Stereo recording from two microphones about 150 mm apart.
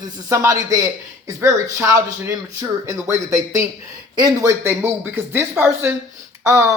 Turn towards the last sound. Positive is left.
turn(degrees=-20)  # may be behind; listen again after turning